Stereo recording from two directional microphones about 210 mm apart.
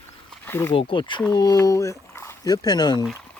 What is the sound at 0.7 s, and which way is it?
Speech, 25° left (ahead or behind).